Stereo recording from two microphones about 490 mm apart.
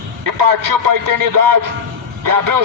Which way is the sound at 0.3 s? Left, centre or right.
Right.